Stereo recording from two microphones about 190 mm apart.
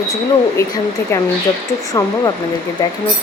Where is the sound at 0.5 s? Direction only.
15° left (ahead or behind).